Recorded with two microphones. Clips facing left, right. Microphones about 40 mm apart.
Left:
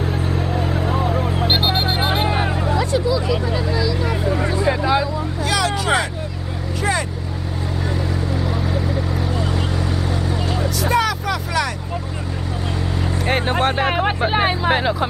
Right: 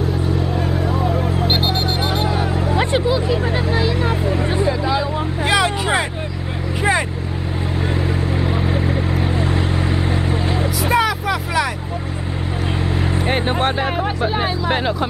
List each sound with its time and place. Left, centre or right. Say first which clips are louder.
0.4 s vehicle: right 1 dB; centre; by 2.5 s left
2.7 s a sound: right 2 dB; right
3.7 s vehicle: right 3 dB; right
4.6 s vehicle: left 5 dB; left
7.9 s vehicle: right 2 dB; right
10.8 s vehicle: right 1 dB; centre
13.3 s vehicle: left 1 dB; centre
13.8 s vehicle: left 1 dB; left
14.7 s music: left 1 dB; centre